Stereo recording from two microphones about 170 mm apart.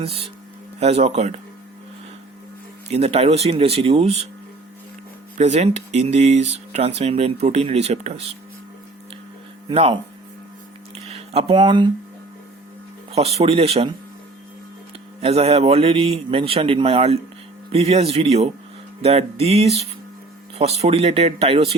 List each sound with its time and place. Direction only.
0.0 s speech: 35° right (ahead or behind)
2.9 s speech: 35° right (ahead or behind)
5.4 s speech: 40° right (ahead or behind)
9.6 s speech: 35° right (ahead or behind)
10.9 s a sound: 35° right (ahead or behind)
13.1 s speech: 35° right (ahead or behind)
15.2 s speech: 35° right (ahead or behind)